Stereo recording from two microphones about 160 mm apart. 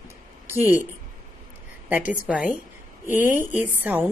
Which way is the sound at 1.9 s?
10° right (ahead or behind).